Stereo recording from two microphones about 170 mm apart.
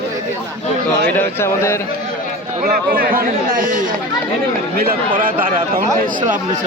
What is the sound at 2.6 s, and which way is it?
Speech, 60° right (ahead or behind).